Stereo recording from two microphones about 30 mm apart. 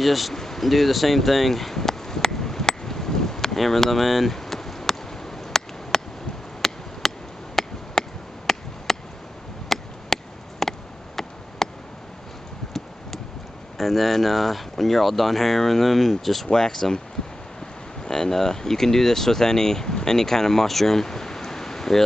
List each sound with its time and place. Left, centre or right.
0.0 s speech: centre
0.3 s speech: centre
0.7 s chop: centre
3.5 s speech: centre
4.4 s a sound: centre
9.7 s chop: centre
11.1 s a sound: centre
13.7 s speech: centre
16.4 s speech: centre
18.0 s speech: centre
20.6 s a sound: centre